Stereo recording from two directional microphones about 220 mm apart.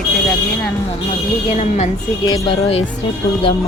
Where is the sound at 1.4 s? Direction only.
30° left (ahead or behind).